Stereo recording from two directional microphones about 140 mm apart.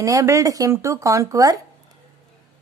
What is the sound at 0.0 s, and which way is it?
Speech, 20° right (ahead or behind).